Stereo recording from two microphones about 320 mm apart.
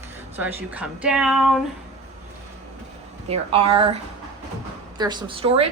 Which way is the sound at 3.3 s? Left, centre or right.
Centre.